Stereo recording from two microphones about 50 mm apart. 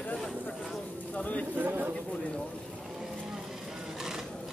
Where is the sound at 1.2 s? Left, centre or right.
Left.